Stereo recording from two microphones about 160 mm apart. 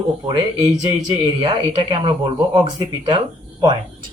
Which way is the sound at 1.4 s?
35° right (ahead or behind).